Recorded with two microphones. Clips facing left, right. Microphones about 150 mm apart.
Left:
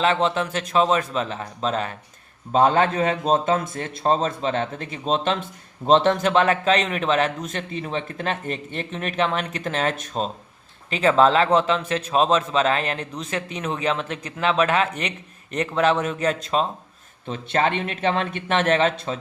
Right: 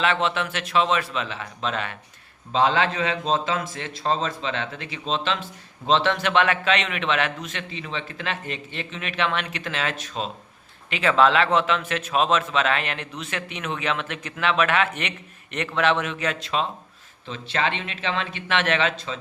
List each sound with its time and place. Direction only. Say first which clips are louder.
0.0 s a man's voice: left 3 dB; 35° left (ahead or behind)
2.5 s a man's voice: left 3 dB; 45° left (ahead or behind)